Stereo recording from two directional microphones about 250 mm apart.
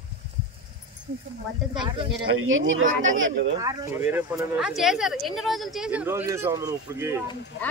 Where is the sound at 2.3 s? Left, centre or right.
Right.